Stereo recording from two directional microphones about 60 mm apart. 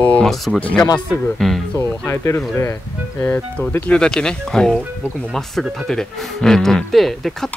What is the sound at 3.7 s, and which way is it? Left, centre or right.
Speech, left.